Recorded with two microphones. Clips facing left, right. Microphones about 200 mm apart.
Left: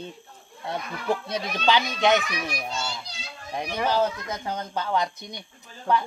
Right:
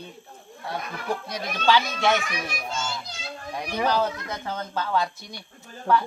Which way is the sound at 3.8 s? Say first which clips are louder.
Even; 15° left (ahead or behind).